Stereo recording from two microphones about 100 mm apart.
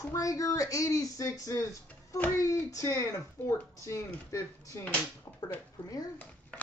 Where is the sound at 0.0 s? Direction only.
35° left (ahead or behind).